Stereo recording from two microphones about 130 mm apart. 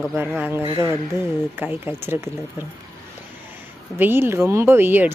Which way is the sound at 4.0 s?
15° right (ahead or behind).